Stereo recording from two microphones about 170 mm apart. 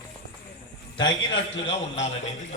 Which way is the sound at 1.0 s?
30° left (ahead or behind).